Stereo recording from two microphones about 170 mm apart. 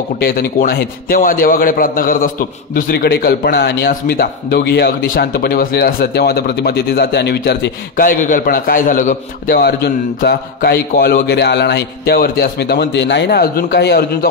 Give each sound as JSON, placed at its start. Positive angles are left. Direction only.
{"t": 0.2, "sound": "a man's voice", "side_deg": 60}
{"t": 8.1, "sound": "a man's voice", "side_deg": 50}